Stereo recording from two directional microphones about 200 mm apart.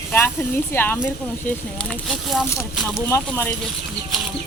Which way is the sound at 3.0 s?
10° left (ahead or behind).